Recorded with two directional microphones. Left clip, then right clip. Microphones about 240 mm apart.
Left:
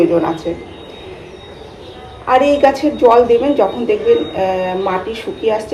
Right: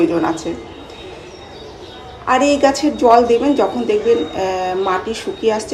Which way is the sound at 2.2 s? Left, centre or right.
Centre.